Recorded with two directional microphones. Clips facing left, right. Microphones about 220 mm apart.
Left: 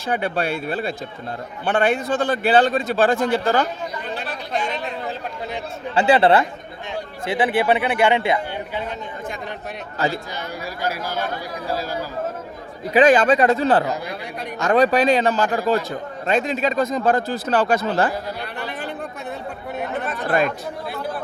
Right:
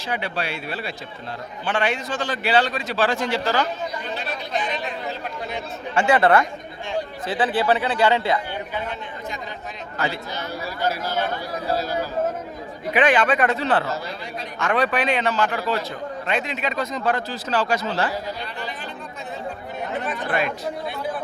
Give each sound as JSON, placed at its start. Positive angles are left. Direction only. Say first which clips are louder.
{"t": 0.1, "sound": "a man's voice", "louder": "left 5 dB", "side_deg": 50}
{"t": 6.1, "sound": "speech", "louder": "even", "side_deg": 30}
{"t": 7.3, "sound": "speech", "louder": "left 2 dB", "side_deg": 15}
{"t": 10.0, "sound": "speech", "louder": "left 3 dB", "side_deg": 35}
{"t": 10.8, "sound": "speech", "louder": "right 1 dB", "side_deg": 10}
{"t": 12.9, "sound": "a man's voice", "louder": "left 5 dB", "side_deg": 40}